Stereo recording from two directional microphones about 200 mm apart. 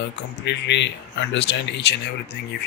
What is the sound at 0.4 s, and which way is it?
Speech, 60° left (ahead or behind).